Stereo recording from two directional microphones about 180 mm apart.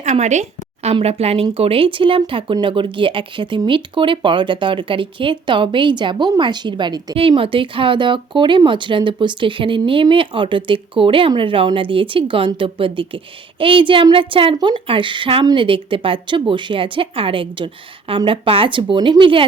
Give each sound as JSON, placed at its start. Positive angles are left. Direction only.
{"t": 0.0, "sound": "speech", "side_deg": -40}